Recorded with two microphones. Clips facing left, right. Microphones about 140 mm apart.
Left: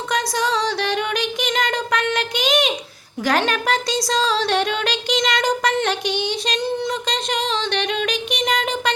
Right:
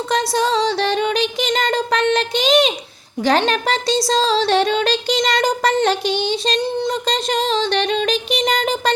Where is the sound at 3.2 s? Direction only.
25° right (ahead or behind).